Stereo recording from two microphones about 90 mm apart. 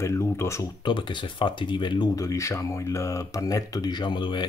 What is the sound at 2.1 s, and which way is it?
Speech, 35° left (ahead or behind).